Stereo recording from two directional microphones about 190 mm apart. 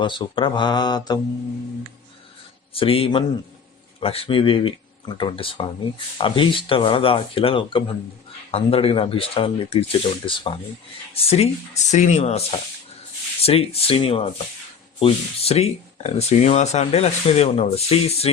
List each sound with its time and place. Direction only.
0.0 s speech: 25° left (ahead or behind)
2.7 s speech: 30° left (ahead or behind)